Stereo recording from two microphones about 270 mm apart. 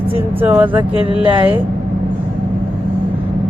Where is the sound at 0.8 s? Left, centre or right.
Centre.